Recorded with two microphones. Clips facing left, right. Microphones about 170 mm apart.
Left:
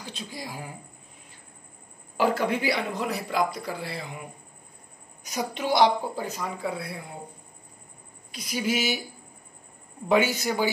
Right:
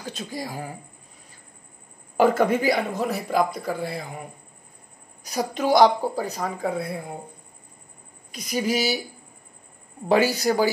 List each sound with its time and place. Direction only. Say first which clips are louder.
0.0 s speech: right 5 dB; 45° right (ahead or behind)
2.1 s a woman's voice: right 5 dB; 50° right (ahead or behind)
8.3 s a woman's voice: right 3 dB; 45° right (ahead or behind)
10.0 s a woman's voice: right 3 dB; 35° right (ahead or behind)